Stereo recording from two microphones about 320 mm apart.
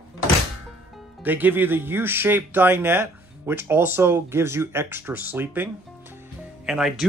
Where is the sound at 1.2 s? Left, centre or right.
Centre.